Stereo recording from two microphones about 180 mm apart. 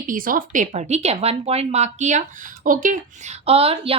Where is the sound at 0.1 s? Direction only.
50° right (ahead or behind).